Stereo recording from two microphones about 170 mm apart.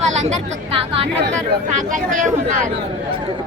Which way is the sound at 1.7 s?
50° right (ahead or behind).